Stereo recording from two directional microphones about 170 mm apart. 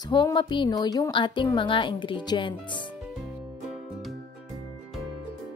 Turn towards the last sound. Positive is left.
turn(degrees=0)  # may be behind; listen again after turning